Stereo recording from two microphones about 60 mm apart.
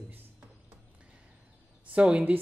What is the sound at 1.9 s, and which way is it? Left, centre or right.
Speech, right.